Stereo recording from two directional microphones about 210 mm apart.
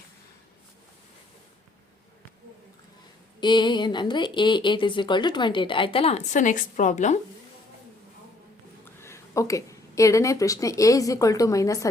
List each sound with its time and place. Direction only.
3.4 s speech: 20° left (ahead or behind)
8.8 s speech: 10° left (ahead or behind)